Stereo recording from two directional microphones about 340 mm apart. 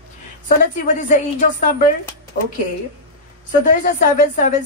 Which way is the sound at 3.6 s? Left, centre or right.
Left.